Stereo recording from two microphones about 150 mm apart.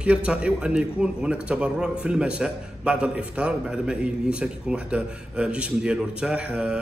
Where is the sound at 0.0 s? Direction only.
5° right (ahead or behind).